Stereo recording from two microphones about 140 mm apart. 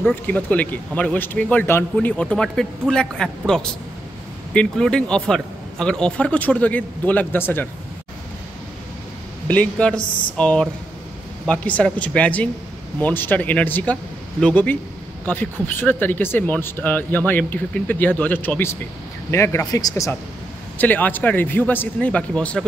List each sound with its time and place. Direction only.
0.0 s speech: 10° left (ahead or behind)
9.5 s speech: 10° left (ahead or behind); by 20.1 s 25° left (ahead or behind)
20.7 s speech: 10° left (ahead or behind)